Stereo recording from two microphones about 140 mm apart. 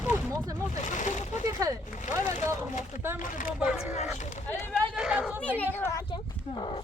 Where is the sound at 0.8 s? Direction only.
60° left (ahead or behind).